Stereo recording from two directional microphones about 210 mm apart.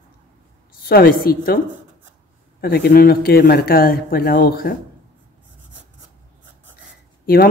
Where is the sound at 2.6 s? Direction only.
45° left (ahead or behind).